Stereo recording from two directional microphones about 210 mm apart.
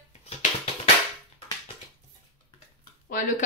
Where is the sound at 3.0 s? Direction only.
40° left (ahead or behind).